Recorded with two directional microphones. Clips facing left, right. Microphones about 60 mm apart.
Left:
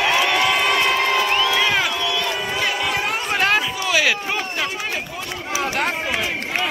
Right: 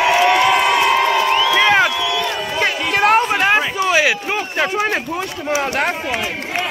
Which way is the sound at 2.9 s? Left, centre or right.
Right.